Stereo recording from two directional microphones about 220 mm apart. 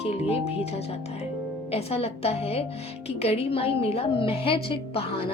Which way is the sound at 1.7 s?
25° left (ahead or behind).